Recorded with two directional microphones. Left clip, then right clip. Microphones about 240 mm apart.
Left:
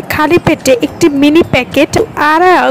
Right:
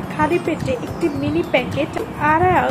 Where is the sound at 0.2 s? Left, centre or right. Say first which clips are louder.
Left 9 dB; left.